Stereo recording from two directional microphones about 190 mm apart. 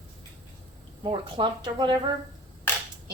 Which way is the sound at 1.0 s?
25° right (ahead or behind).